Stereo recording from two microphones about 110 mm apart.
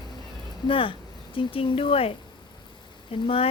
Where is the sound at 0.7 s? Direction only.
50° left (ahead or behind).